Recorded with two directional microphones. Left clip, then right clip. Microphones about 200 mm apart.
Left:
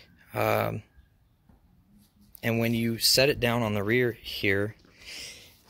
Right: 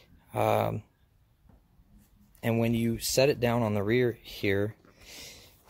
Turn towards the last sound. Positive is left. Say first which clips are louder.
# left 5 dB
turn(degrees=-5)  # may be behind; listen again after turning